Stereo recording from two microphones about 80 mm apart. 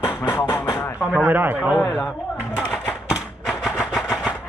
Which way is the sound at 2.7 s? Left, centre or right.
Centre.